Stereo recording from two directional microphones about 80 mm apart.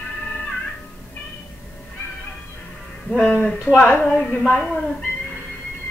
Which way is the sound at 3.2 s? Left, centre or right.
Centre.